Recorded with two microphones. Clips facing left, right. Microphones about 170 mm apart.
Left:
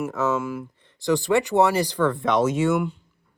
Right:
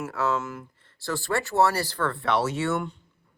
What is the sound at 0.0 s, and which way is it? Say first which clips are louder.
Speech: left 3 dB; 15° left (ahead or behind).